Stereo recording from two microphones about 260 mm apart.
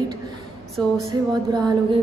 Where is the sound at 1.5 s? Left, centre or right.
Centre.